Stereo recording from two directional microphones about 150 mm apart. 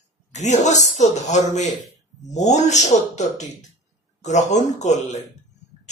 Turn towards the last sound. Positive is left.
turn(degrees=50)  # may be behind; listen again after turning